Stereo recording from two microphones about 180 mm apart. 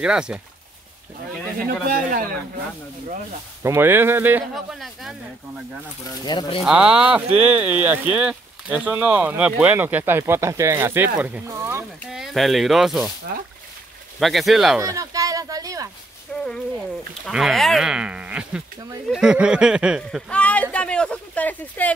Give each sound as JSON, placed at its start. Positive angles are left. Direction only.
{"t": 0.0, "sound": "speech", "side_deg": -5}
{"t": 1.9, "sound": "speech", "side_deg": -50}
{"t": 3.6, "sound": "speech", "side_deg": -15}
{"t": 6.0, "sound": "speech", "side_deg": 25}
{"t": 6.6, "sound": "speech", "side_deg": -5}
{"t": 12.1, "sound": "speech", "side_deg": 0}
{"t": 14.2, "sound": "speech", "side_deg": 0}
{"t": 14.8, "sound": "a sound", "side_deg": -20}
{"t": 16.3, "sound": "a sound", "side_deg": 5}
{"t": 17.3, "sound": "speech", "side_deg": 0}
{"t": 20.2, "sound": "a sound", "side_deg": 5}